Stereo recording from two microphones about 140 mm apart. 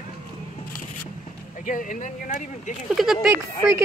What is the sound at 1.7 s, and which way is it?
Speech, 70° left (ahead or behind).